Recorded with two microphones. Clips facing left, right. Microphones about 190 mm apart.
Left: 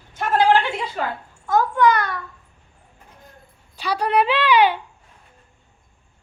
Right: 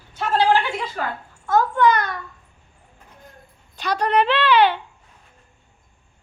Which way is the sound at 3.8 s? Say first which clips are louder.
Even; 10° left (ahead or behind).